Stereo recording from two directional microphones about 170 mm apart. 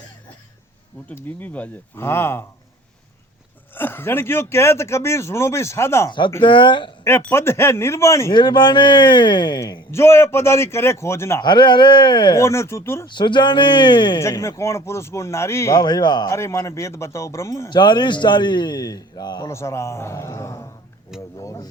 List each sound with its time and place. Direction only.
1.0 s speech: 10° left (ahead or behind)
3.8 s speech: 10° left (ahead or behind)
6.1 s a man's voice: 25° left (ahead or behind)
7.0 s speech: 15° left (ahead or behind)
8.3 s a man's voice: 25° left (ahead or behind)
11.4 s a man's voice: 25° left (ahead or behind)
12.4 s speech: 15° left (ahead or behind)
13.1 s a man's voice: 25° left (ahead or behind)